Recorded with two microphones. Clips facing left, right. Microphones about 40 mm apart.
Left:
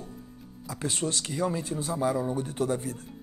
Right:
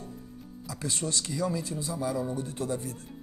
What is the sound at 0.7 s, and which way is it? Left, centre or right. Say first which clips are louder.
Speech: left 3 dB; left.